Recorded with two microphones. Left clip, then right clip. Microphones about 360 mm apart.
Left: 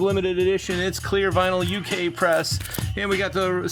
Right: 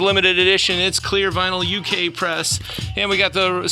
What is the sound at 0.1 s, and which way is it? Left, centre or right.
Speech, centre.